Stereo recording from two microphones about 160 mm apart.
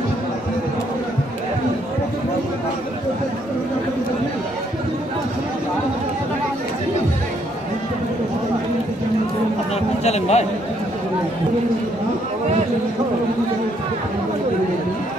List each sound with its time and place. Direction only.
10.0 s a man's voice: 40° left (ahead or behind)